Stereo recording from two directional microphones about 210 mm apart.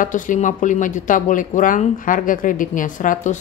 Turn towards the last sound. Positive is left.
turn(degrees=40)  # may be behind; listen again after turning